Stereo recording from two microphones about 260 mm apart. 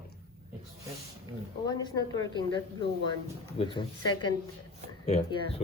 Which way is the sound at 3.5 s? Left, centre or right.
Centre.